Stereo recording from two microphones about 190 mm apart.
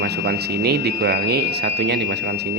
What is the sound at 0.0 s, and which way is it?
Speech, 55° right (ahead or behind).